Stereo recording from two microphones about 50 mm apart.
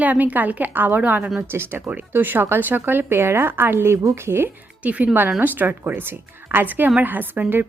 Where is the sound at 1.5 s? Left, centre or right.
Right.